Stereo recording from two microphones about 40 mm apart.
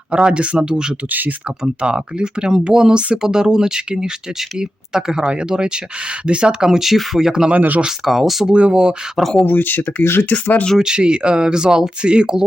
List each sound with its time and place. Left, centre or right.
0.1 s speech: right
3.2 s speech: centre
7.5 s speech: right
8.0 s speech: centre
8.4 s speech: right
9.1 s speech: centre
9.4 s speech: left
10.0 s speech: left
10.2 s speech: left
10.8 s speech: right